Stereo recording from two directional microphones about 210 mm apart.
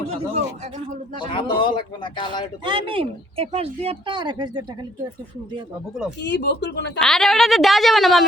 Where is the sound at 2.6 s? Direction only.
25° right (ahead or behind).